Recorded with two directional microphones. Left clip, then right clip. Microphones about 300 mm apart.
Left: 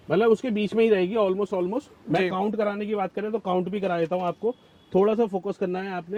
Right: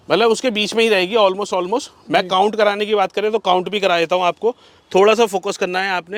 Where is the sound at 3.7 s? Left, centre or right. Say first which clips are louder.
Right 10 dB; centre.